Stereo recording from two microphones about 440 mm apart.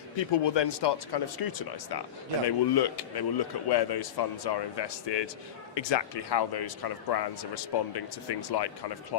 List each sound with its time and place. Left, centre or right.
0.4 s speech: left